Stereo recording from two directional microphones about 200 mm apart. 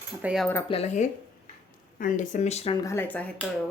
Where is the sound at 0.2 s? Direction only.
5° right (ahead or behind).